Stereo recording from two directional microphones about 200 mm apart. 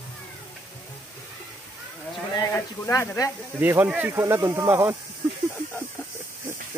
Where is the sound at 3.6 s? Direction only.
10° right (ahead or behind).